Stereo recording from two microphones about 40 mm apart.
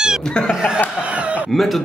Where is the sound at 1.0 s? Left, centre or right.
Right.